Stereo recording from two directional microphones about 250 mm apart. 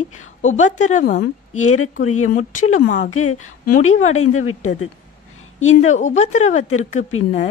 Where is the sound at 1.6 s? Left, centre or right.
Left.